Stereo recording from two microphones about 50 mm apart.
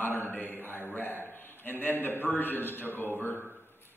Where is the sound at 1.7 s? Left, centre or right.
Left.